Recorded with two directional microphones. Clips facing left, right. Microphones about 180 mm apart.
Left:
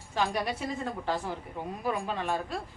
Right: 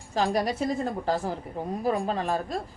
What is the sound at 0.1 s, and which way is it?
A woman's voice, 40° right (ahead or behind).